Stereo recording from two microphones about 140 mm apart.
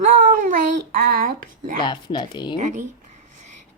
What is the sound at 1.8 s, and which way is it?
Speech, 35° left (ahead or behind).